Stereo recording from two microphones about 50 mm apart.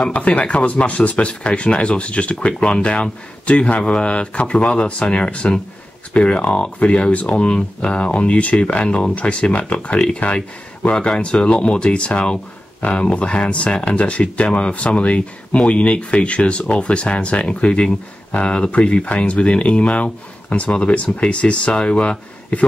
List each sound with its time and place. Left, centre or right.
0.1 s speech: left